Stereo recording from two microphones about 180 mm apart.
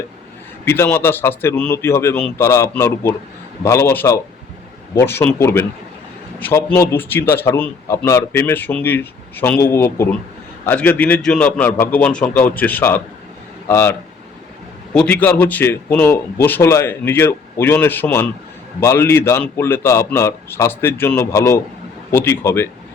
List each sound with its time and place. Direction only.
0.6 s a man's voice: 10° left (ahead or behind)
14.9 s a man's voice: 10° left (ahead or behind)